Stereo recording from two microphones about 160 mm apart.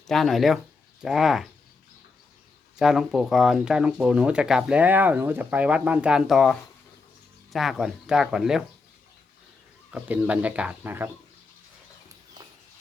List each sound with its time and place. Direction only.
0.1 s speech: centre (ahead or behind)
2.7 s speech: 5° right (ahead or behind)
9.9 s speech: 10° right (ahead or behind)
12.4 s horse: 20° right (ahead or behind)